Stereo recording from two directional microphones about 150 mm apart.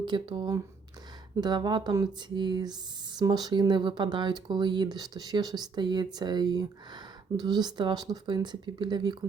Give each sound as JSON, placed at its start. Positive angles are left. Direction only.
{"t": 0.0, "sound": "speech", "side_deg": -30}